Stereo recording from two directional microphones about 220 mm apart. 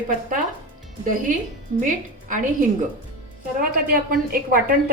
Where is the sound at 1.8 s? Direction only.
35° right (ahead or behind).